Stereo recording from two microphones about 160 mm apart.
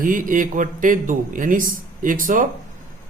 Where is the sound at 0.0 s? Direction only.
55° right (ahead or behind).